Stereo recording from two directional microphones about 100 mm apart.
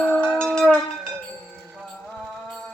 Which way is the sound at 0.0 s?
10° left (ahead or behind).